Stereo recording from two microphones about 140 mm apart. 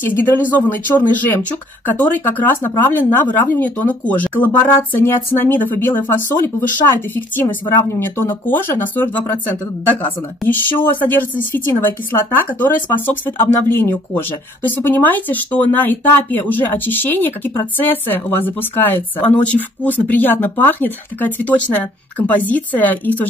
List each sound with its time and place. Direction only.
0.0 s speech: 15° left (ahead or behind)
10.4 s speech: 15° left (ahead or behind)